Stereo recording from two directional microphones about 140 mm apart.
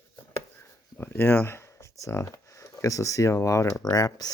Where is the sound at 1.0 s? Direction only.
15° left (ahead or behind).